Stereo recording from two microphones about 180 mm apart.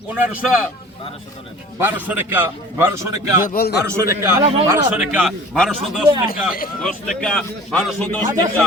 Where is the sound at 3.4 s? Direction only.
50° left (ahead or behind).